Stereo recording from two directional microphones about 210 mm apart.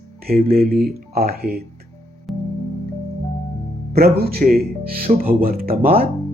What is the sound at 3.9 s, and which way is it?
Speech, 50° right (ahead or behind).